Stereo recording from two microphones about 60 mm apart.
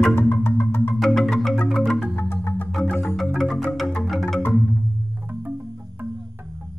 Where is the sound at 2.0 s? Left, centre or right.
Left.